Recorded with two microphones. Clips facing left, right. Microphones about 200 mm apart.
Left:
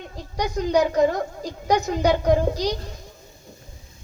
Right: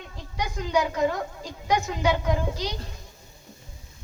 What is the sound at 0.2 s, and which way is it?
A woman's voice, 40° left (ahead or behind).